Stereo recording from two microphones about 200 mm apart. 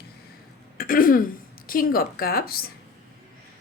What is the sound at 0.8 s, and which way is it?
A woman's voice, 45° left (ahead or behind).